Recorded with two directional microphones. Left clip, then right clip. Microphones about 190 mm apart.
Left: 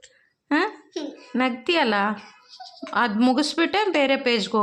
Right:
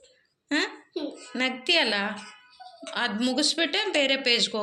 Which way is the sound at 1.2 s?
40° left (ahead or behind).